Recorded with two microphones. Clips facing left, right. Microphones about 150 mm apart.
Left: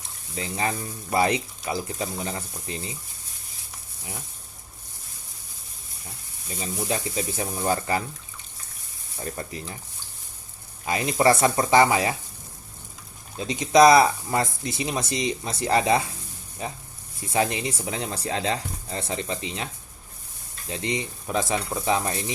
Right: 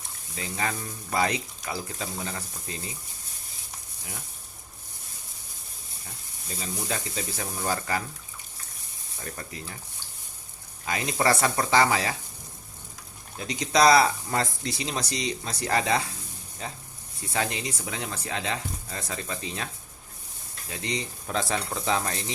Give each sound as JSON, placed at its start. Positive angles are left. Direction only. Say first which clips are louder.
{"t": 0.3, "sound": "speech", "louder": "left 3 dB", "side_deg": 25}
{"t": 6.6, "sound": "speech", "louder": "left 4 dB", "side_deg": 25}
{"t": 9.2, "sound": "speech", "louder": "left 5 dB", "side_deg": 25}
{"t": 10.8, "sound": "speech", "louder": "left 5 dB", "side_deg": 20}
{"t": 13.3, "sound": "speech", "louder": "left 6 dB", "side_deg": 20}
{"t": 20.7, "sound": "speech", "louder": "left 4 dB", "side_deg": 20}